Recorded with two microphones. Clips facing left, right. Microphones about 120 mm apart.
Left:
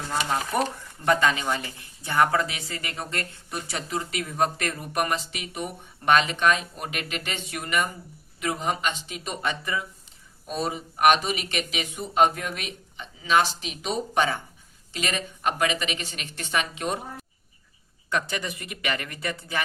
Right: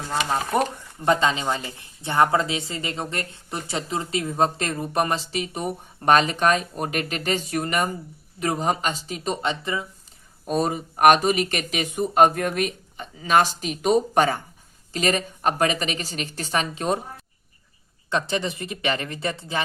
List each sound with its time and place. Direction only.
0.1 s a woman's voice: 25° right (ahead or behind)
10.4 s a woman's voice: 45° right (ahead or behind)
18.1 s speech: 25° right (ahead or behind)